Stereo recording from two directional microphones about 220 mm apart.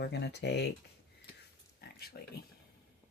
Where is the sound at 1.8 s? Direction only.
45° left (ahead or behind).